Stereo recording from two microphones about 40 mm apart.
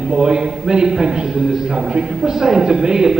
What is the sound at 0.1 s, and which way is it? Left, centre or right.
A man's voice, centre.